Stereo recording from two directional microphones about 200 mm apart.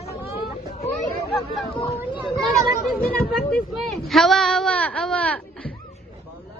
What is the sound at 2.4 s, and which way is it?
Speech, centre (ahead or behind).